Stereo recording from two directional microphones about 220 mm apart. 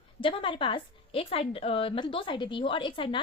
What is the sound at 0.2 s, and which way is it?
A woman's voice, 25° left (ahead or behind).